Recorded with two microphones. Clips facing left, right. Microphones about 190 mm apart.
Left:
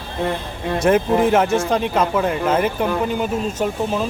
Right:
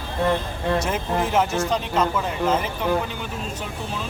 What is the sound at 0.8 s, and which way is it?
Speech, 55° left (ahead or behind).